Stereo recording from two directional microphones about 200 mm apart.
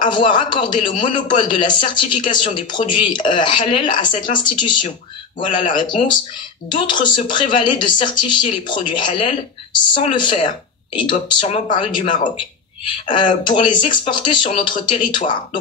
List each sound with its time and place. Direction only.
0.1 s speech: 25° left (ahead or behind)